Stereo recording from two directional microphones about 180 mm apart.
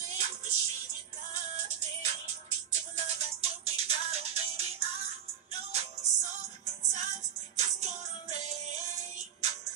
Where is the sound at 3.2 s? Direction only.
35° right (ahead or behind).